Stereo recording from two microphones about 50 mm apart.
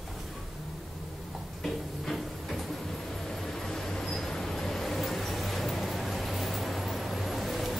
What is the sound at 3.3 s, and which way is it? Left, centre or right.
Vehicle, centre.